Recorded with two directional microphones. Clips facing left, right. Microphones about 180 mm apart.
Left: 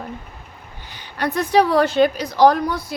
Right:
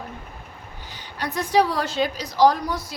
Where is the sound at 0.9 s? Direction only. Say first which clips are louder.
Left 6 dB; 60° left (ahead or behind).